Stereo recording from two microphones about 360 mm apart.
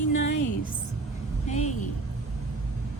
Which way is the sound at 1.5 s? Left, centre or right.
Centre.